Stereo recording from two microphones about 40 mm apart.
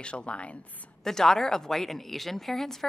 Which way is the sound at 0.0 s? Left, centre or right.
Left.